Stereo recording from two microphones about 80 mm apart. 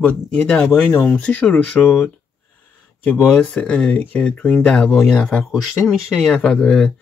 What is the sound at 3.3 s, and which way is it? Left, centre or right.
Speech, centre.